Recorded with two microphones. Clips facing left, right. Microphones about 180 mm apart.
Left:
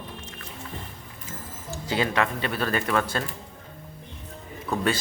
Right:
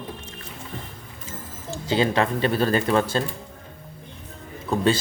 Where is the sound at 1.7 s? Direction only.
25° right (ahead or behind).